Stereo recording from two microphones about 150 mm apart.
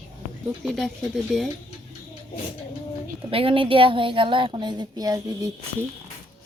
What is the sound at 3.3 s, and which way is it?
A woman's voice, 35° right (ahead or behind).